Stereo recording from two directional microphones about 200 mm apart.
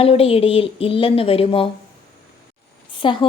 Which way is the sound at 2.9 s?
25° left (ahead or behind).